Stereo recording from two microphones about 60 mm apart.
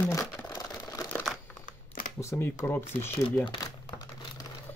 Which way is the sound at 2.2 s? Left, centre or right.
Left.